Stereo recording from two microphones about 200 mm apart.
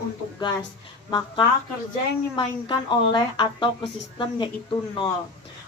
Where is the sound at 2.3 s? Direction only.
25° left (ahead or behind).